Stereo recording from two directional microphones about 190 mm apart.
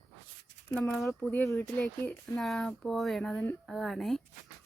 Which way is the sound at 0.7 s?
5° left (ahead or behind).